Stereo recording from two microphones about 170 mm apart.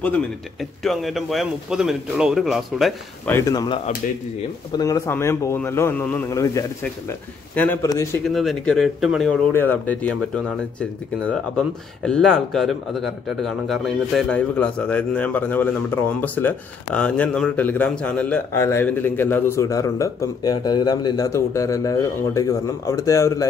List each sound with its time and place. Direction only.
0.0 s speech: 5° left (ahead or behind)
3.3 s a man's voice: 15° left (ahead or behind)
8.3 s speech: centre (ahead or behind)
9.5 s a man's voice: 10° left (ahead or behind)